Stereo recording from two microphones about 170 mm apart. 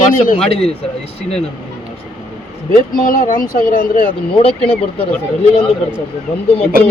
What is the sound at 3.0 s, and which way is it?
A man's voice, 55° left (ahead or behind).